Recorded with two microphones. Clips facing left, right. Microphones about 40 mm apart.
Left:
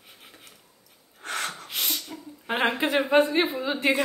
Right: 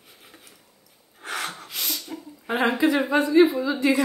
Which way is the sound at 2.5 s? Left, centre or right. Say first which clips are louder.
Right 3 dB; left.